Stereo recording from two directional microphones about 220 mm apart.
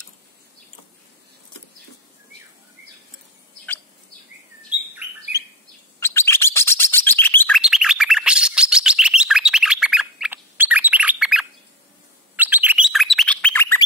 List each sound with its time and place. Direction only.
4.6 s bird: 5° right (ahead or behind)
5.9 s bird: 10° left (ahead or behind)
12.4 s chirp: 10° right (ahead or behind); by 13.8 s 10° left (ahead or behind)